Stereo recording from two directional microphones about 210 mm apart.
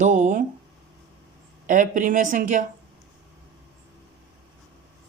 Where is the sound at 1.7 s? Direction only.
35° right (ahead or behind).